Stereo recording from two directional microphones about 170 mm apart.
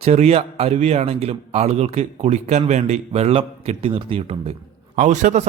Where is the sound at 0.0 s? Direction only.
40° right (ahead or behind).